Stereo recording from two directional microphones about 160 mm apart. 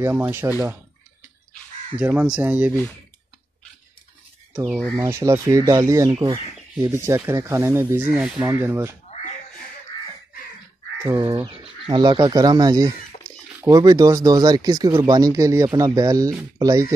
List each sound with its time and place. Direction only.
0.0 s speech: 15° right (ahead or behind)
2.0 s speech: 10° right (ahead or behind)
4.7 s speech: 5° left (ahead or behind)
5.0 s speech: 20° right (ahead or behind)
11.9 s speech: 25° right (ahead or behind)
13.1 s a sound: 50° left (ahead or behind)
13.6 s speech: 25° right (ahead or behind)